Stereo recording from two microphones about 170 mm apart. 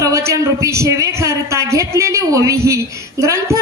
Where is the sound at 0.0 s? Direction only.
20° right (ahead or behind).